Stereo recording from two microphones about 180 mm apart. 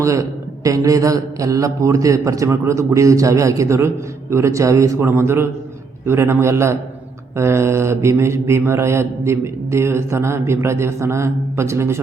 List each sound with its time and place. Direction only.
0.0 s a man's voice: 15° right (ahead or behind)